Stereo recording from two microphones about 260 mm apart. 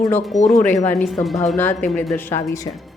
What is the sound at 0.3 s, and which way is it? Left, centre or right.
Speech, left.